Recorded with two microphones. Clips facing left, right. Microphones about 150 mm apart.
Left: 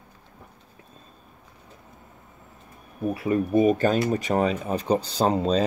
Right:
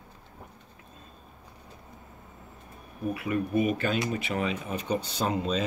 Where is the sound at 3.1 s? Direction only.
35° left (ahead or behind).